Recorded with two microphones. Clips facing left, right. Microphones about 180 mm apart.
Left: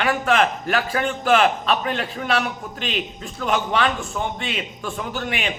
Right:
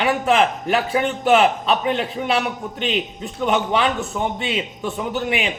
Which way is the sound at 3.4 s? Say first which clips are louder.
Right 2 dB; 20° right (ahead or behind).